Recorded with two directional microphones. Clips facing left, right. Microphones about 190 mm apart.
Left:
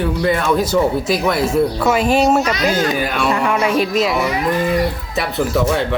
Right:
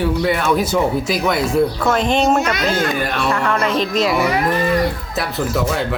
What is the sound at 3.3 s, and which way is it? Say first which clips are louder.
A woman's voice: left 2 dB; 15° left (ahead or behind).